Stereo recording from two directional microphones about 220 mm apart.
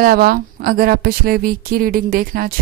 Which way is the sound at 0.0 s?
40° right (ahead or behind).